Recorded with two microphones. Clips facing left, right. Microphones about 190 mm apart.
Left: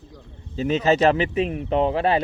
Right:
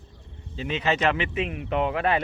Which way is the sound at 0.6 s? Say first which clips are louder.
Left 7 dB; 40° left (ahead or behind).